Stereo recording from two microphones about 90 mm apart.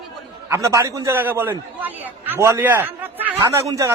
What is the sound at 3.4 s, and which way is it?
Speech, 35° right (ahead or behind).